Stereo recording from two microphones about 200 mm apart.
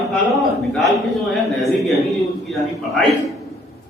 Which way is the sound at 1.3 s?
Centre (ahead or behind).